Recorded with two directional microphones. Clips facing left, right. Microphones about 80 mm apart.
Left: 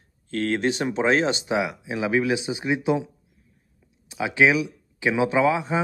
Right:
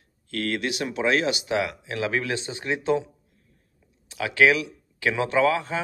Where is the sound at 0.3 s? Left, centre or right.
Left.